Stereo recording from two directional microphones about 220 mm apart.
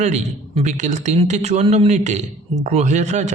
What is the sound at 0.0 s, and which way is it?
A man's voice, 30° right (ahead or behind).